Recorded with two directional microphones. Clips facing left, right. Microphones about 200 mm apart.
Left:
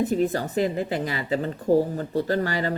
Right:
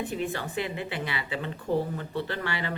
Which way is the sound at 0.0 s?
40° left (ahead or behind).